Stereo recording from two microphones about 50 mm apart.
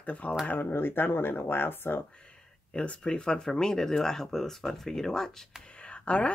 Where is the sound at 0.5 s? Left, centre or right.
Left.